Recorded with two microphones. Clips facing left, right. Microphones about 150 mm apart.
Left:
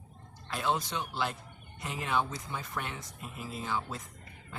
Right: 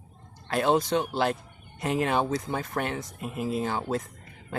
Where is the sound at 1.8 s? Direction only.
65° right (ahead or behind).